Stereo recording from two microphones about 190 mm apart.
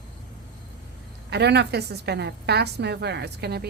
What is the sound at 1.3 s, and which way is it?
A woman's voice, 60° right (ahead or behind).